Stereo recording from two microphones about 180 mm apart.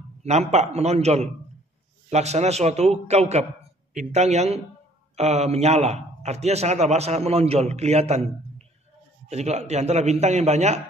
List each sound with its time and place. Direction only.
0.2 s a man's voice: 35° right (ahead or behind)